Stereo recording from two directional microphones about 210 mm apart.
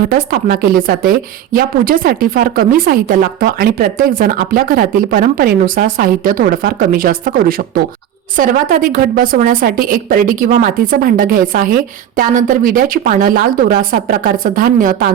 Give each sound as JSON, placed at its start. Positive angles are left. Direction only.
{"t": 0.3, "sound": "a woman's voice", "side_deg": -45}